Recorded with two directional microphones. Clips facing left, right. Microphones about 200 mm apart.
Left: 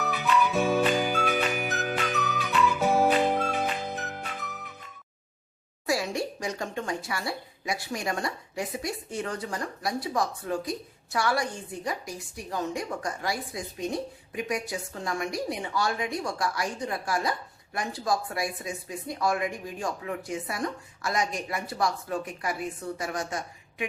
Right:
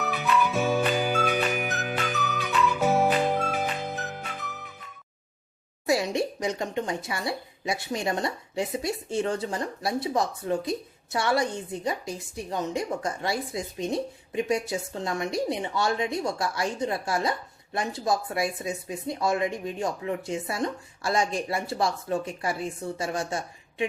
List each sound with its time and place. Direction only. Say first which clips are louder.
0.0 s music: even; centre (ahead or behind)
5.8 s speech: right 3 dB; 20° right (ahead or behind)